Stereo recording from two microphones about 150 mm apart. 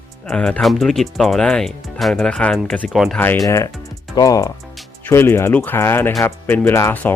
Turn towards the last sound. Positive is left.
turn(degrees=15)  # may be behind; listen again after turning